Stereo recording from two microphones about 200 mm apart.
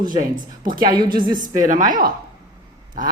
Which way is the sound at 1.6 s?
40° right (ahead or behind).